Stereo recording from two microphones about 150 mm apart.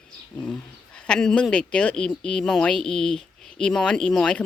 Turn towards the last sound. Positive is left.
turn(degrees=5)  # may be behind; listen again after turning